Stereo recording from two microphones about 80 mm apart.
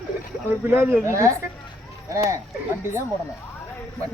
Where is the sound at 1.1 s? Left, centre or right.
Right.